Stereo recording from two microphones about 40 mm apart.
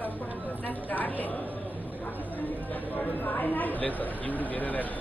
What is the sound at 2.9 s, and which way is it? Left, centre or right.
Speech, left.